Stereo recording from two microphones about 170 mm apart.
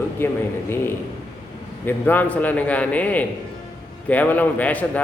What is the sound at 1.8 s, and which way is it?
A man's voice, 10° left (ahead or behind).